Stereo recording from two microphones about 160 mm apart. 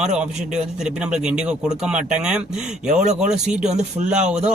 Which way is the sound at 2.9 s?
50° right (ahead or behind).